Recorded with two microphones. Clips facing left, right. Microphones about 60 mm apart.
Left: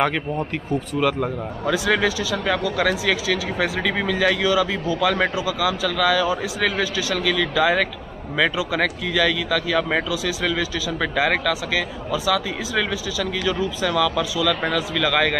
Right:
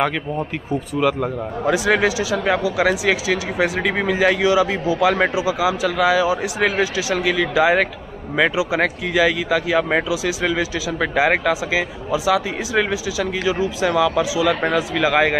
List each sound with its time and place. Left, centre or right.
0.9 s speech: centre
1.7 s speech: centre